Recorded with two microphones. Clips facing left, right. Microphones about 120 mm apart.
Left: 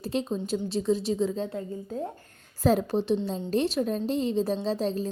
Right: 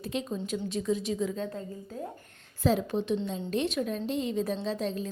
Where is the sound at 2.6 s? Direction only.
40° left (ahead or behind).